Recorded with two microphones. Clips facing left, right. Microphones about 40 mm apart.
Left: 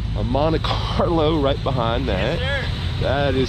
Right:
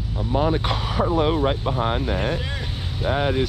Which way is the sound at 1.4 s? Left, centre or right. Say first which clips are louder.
Left 2 dB; left.